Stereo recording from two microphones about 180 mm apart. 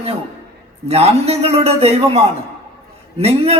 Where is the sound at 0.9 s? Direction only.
35° right (ahead or behind).